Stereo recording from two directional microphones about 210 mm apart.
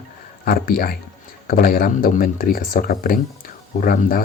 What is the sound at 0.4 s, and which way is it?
Speech, 40° left (ahead or behind).